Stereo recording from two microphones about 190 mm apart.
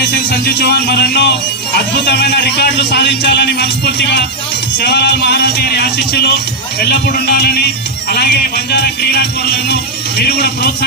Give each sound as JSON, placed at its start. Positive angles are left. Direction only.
{"t": 0.0, "sound": "a man's voice", "side_deg": 60}